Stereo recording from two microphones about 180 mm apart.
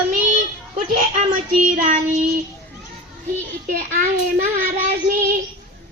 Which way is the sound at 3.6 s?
45° right (ahead or behind).